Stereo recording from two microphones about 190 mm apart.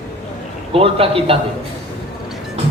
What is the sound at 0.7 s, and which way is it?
Speech, 30° right (ahead or behind).